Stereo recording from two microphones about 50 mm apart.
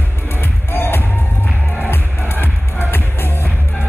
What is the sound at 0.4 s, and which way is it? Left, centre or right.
Music, left.